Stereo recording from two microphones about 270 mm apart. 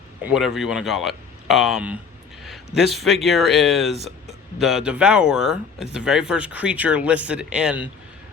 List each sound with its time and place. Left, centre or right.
0.3 s speech: centre